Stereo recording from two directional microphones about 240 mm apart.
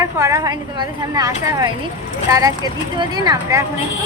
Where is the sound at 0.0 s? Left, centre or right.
Centre.